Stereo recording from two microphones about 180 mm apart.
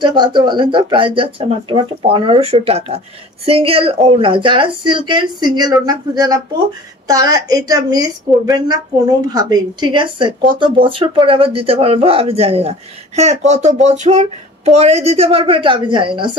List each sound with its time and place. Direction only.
0.0 s a woman's voice: 25° right (ahead or behind)